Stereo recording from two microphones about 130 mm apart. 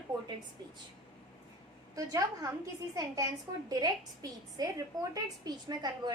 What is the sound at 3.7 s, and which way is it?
A woman's voice, 30° right (ahead or behind).